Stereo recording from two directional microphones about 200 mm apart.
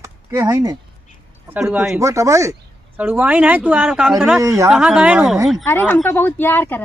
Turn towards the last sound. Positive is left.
turn(degrees=10)  # may be behind; listen again after turning